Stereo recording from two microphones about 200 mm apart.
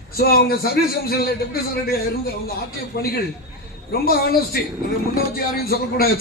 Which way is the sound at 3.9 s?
50° left (ahead or behind).